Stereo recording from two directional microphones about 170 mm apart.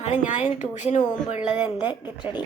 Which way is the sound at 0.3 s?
45° left (ahead or behind).